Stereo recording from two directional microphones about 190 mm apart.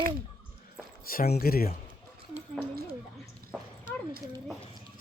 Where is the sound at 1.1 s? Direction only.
50° left (ahead or behind).